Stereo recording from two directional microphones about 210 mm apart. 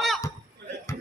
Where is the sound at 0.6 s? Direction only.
55° right (ahead or behind).